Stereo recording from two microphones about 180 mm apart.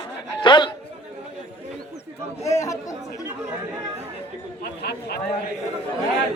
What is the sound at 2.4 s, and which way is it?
Chatter, 15° left (ahead or behind).